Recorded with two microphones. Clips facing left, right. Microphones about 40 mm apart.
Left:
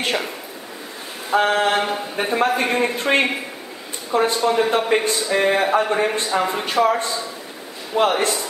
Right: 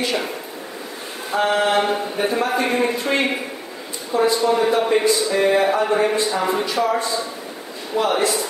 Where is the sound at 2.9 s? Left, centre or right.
Left.